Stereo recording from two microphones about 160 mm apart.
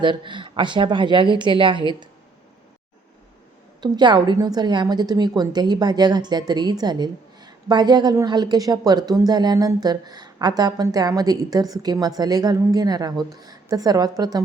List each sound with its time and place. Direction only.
0.0 s a woman's voice: 30° right (ahead or behind)
3.8 s a woman's voice: 25° right (ahead or behind)